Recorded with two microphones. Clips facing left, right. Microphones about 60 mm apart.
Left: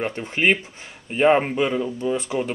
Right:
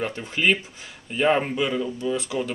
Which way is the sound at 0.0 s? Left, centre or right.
Left.